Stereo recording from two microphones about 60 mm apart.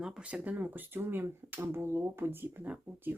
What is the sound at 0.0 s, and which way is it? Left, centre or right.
Speech, centre.